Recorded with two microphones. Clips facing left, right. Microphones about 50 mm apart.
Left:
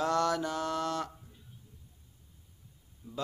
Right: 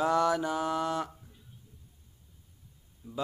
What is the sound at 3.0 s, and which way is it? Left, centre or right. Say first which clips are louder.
Speech: right 2 dB; right.